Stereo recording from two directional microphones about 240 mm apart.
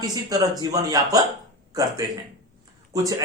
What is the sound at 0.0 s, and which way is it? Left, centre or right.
Speech, centre.